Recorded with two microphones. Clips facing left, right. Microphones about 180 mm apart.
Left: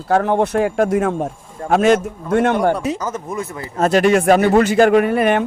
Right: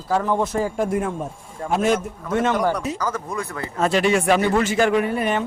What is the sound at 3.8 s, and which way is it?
Speech, 50° left (ahead or behind).